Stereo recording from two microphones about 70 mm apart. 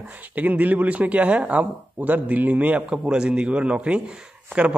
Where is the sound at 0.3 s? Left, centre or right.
Right.